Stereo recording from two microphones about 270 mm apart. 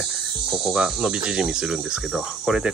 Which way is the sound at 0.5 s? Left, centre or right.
Centre.